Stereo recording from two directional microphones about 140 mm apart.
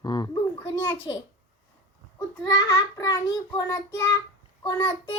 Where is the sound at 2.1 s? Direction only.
25° left (ahead or behind).